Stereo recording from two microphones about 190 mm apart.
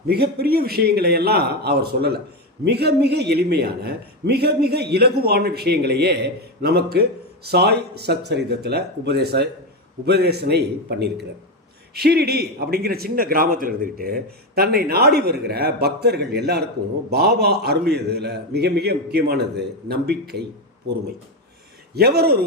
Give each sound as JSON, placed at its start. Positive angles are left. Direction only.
{"t": 0.1, "sound": "a man's voice", "side_deg": -55}
{"t": 21.9, "sound": "a man's voice", "side_deg": -55}